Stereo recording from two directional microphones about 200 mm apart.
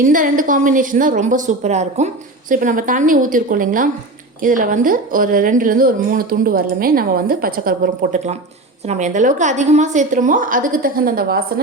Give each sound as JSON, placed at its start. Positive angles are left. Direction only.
{"t": 0.0, "sound": "a woman's voice", "side_deg": -40}